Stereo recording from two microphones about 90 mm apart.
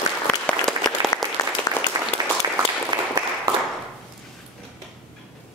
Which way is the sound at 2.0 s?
50° right (ahead or behind).